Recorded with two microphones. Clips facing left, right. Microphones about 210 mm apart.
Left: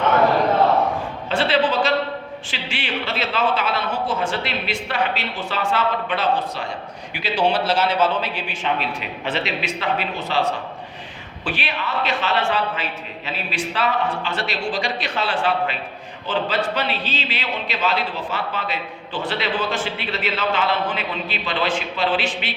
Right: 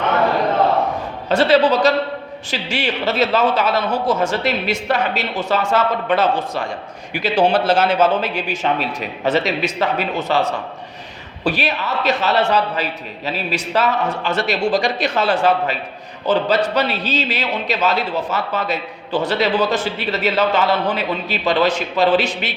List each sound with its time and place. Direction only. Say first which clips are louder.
1.3 s a man's voice: right 6 dB; 40° right (ahead or behind)